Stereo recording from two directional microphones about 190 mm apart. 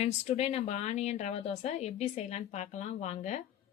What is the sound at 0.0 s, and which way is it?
A woman's voice, 35° left (ahead or behind).